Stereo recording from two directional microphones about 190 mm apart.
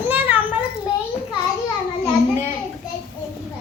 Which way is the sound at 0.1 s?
10° right (ahead or behind).